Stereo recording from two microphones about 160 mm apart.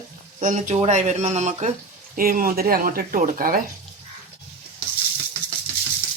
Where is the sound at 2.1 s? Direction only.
65° right (ahead or behind).